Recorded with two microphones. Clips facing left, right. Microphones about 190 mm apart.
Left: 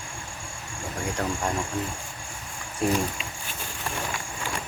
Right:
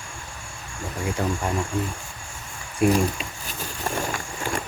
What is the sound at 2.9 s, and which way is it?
Speech, 40° right (ahead or behind).